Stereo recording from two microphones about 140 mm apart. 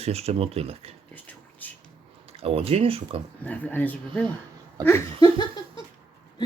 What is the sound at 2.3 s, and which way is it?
Speech, 45° right (ahead or behind).